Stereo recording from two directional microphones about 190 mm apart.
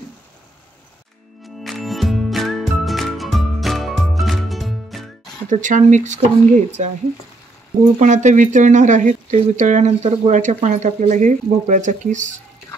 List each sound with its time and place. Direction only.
1.6 s music: centre (ahead or behind)
5.5 s speech: 40° right (ahead or behind)
8.0 s speech: 40° right (ahead or behind)